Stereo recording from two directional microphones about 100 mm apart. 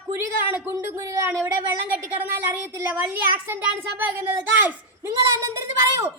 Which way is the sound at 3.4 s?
20° right (ahead or behind).